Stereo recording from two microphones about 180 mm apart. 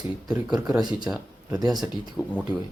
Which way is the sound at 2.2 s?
5° right (ahead or behind).